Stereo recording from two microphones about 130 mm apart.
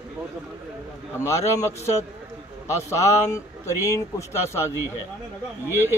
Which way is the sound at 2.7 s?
25° left (ahead or behind).